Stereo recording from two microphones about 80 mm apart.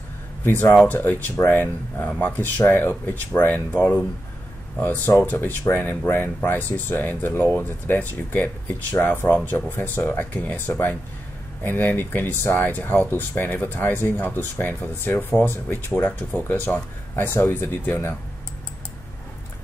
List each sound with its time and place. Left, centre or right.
0.4 s speech: left